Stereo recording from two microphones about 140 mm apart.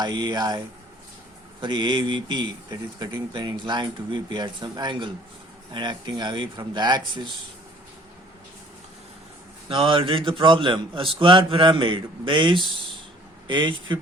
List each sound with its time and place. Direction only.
0.0 s speech: 30° right (ahead or behind)
1.6 s speech: 30° right (ahead or behind)
9.6 s speech: 40° right (ahead or behind)